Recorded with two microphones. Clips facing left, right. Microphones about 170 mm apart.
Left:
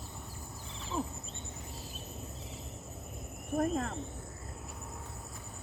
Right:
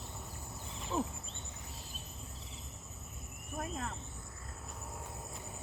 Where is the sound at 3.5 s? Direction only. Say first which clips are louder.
Left 9 dB; 50° left (ahead or behind).